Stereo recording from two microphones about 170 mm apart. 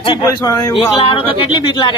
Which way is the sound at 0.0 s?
25° left (ahead or behind).